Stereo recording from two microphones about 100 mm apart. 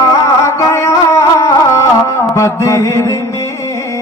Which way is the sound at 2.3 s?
30° left (ahead or behind).